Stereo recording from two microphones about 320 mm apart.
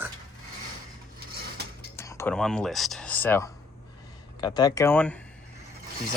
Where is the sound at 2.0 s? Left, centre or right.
Centre.